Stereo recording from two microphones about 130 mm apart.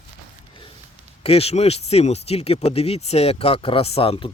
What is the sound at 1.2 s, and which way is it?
Speech, 50° left (ahead or behind).